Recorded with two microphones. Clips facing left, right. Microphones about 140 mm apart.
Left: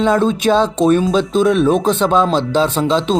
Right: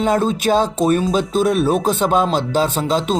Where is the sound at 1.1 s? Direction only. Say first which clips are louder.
Left 3 dB; 45° right (ahead or behind).